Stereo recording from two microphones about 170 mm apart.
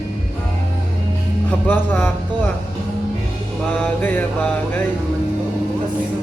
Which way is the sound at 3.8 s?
10° left (ahead or behind).